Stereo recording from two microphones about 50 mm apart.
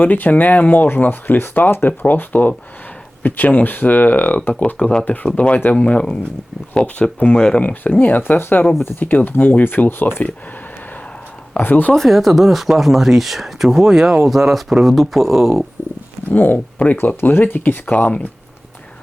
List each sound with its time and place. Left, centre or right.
0.0 s speech: left; by 5.0 s centre
5.0 s speech: left
7.6 s speech: left
8.2 s speech: left
11.6 s speech: left
11.9 s speech: centre
15.8 s a sound: left
16.3 s speech: left